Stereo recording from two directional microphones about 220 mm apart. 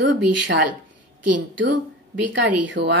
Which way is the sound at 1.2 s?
90° right.